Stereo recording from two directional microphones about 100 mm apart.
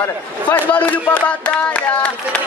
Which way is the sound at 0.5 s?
15° left (ahead or behind).